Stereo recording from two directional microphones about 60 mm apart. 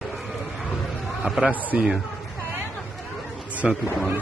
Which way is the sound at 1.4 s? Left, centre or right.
Right.